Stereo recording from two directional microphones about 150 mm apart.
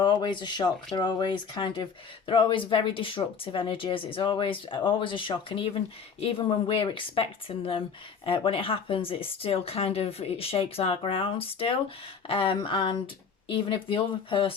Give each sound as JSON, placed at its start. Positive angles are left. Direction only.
{"t": 0.0, "sound": "speech", "side_deg": 30}